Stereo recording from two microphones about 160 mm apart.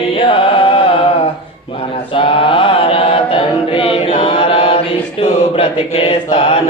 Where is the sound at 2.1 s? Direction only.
35° left (ahead or behind).